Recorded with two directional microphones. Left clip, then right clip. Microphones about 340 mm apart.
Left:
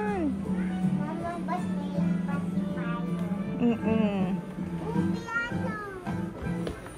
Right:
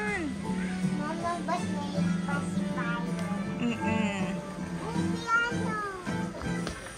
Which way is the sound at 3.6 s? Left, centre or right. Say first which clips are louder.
Left 4 dB; centre.